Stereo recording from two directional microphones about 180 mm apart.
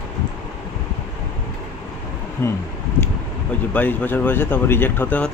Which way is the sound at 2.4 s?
15° left (ahead or behind).